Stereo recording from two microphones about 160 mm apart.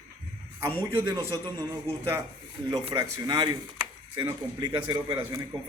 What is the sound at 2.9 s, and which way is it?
A man's voice, 25° right (ahead or behind).